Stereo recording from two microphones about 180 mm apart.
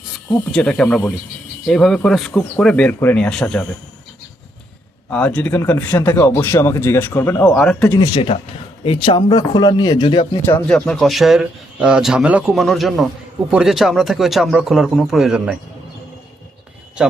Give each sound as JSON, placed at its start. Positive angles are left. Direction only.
{"t": 0.5, "sound": "speech", "side_deg": 5}
{"t": 5.0, "sound": "a man's voice", "side_deg": 10}
{"t": 7.9, "sound": "speech", "side_deg": 25}
{"t": 10.7, "sound": "speech", "side_deg": 5}